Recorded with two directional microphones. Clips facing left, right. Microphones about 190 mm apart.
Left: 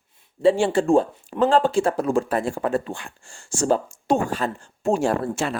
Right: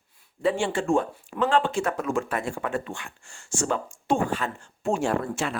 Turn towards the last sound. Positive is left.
turn(degrees=40)  # may be behind; listen again after turning